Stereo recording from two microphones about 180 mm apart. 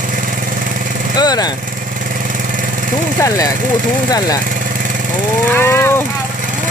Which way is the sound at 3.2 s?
15° left (ahead or behind).